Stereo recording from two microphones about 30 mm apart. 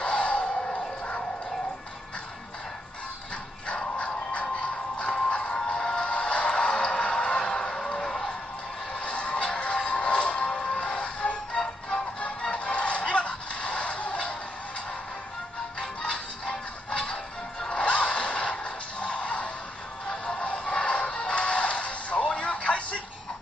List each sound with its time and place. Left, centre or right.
0.0 s a sound: left
0.7 s music: left
4.0 s music: left
8.0 s music: left
9.0 s music: left
12.5 s music: left
16.0 s music: left
20.1 s music: left